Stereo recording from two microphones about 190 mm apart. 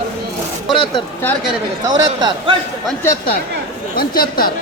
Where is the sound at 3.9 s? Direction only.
50° left (ahead or behind).